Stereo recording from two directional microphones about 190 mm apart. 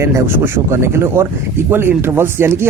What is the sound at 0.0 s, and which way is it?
Speech, 15° right (ahead or behind).